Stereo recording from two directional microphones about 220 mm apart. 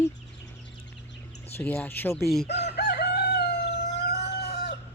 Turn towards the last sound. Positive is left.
turn(degrees=45)  # may be behind; listen again after turning